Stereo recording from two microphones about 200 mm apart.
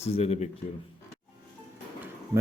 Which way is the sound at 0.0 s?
30° left (ahead or behind).